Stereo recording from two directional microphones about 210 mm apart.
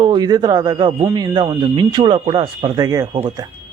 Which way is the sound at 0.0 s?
20° right (ahead or behind).